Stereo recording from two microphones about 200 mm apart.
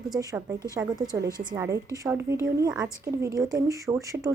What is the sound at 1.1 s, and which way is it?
A woman's voice, 15° right (ahead or behind).